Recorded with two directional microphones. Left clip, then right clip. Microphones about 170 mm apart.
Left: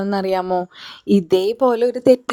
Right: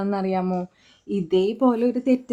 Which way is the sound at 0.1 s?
45° left (ahead or behind).